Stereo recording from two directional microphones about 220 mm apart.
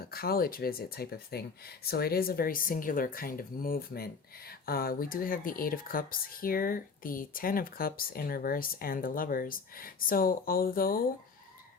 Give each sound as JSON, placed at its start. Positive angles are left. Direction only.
{"t": 0.0, "sound": "speech", "side_deg": 45}